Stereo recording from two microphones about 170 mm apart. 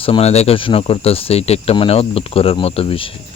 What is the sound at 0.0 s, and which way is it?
Speech, 35° left (ahead or behind).